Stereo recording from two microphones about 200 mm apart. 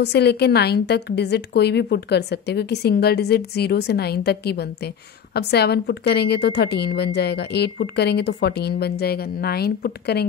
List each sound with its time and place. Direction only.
0.0 s a woman's voice: 55° left (ahead or behind)